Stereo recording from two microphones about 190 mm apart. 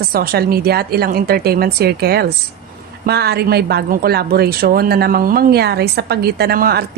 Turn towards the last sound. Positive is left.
turn(degrees=-55)  # may be behind; listen again after turning